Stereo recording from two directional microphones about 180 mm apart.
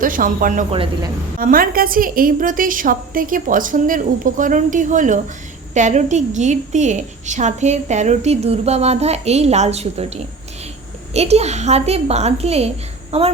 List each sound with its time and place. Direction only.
0.0 s a woman's voice: 50° right (ahead or behind)
0.7 s speech: 30° right (ahead or behind)
1.4 s a woman's voice: 50° right (ahead or behind); by 10.1 s 35° right (ahead or behind)
11.1 s a woman's voice: 35° right (ahead or behind)